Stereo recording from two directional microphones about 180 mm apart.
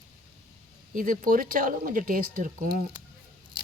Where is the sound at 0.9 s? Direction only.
50° right (ahead or behind).